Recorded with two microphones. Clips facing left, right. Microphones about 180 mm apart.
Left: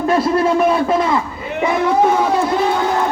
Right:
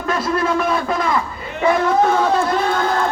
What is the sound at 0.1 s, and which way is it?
Speech, 30° left (ahead or behind).